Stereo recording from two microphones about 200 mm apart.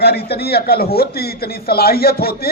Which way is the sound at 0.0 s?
55° left (ahead or behind).